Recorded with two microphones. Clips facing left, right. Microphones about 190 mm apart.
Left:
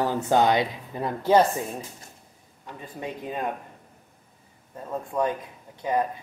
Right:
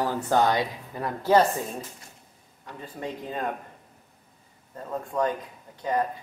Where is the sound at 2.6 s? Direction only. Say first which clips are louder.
Even; 10° left (ahead or behind).